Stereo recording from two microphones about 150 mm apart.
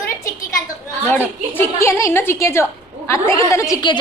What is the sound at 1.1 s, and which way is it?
A woman's voice, 15° left (ahead or behind).